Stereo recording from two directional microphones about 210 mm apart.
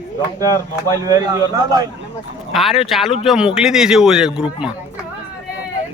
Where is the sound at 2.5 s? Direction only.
Centre (ahead or behind).